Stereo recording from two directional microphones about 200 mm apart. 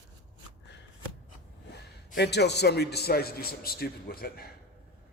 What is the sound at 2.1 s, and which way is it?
A man's voice, 55° left (ahead or behind).